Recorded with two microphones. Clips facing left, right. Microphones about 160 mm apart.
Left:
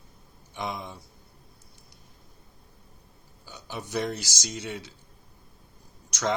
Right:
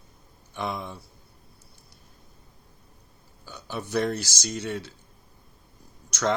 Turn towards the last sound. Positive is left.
turn(degrees=15)  # may be behind; listen again after turning